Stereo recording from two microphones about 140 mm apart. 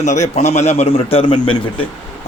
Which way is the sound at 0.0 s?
60° left (ahead or behind).